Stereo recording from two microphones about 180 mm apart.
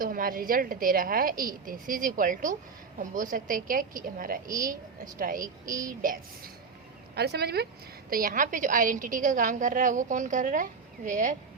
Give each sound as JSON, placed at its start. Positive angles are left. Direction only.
{"t": 0.0, "sound": "a woman's voice", "side_deg": -50}
{"t": 5.6, "sound": "child singing", "side_deg": -20}
{"t": 6.0, "sound": "a woman's voice", "side_deg": -50}
{"t": 7.2, "sound": "speech", "side_deg": -65}
{"t": 8.1, "sound": "a woman's voice", "side_deg": -50}